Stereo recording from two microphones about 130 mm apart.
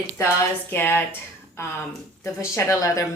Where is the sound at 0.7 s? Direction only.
15° left (ahead or behind).